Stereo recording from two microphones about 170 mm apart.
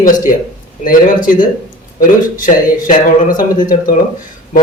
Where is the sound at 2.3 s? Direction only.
50° left (ahead or behind).